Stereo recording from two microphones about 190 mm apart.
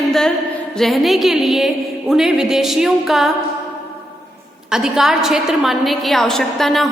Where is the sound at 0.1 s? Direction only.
5° left (ahead or behind).